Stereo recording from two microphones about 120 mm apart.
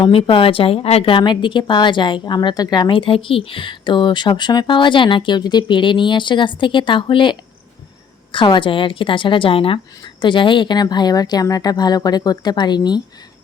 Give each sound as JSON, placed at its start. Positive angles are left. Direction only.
{"t": 0.0, "sound": "a woman's voice", "side_deg": 50}